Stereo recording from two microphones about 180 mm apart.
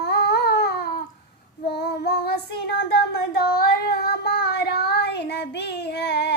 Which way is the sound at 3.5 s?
60° left (ahead or behind).